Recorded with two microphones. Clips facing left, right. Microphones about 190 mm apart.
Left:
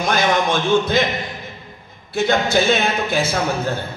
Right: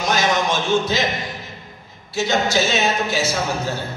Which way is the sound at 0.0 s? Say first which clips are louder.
Left 2 dB; 55° left (ahead or behind).